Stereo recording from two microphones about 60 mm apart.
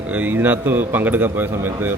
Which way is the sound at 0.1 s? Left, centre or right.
Right.